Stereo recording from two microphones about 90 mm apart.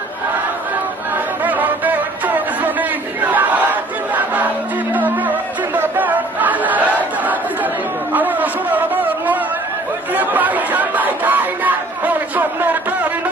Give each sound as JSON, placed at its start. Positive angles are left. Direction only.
{"t": 1.5, "sound": "music", "side_deg": -20}
{"t": 3.2, "sound": "battle cry", "side_deg": -20}
{"t": 4.9, "sound": "music", "side_deg": -20}
{"t": 8.1, "sound": "a sound", "side_deg": -20}
{"t": 10.2, "sound": "music", "side_deg": -20}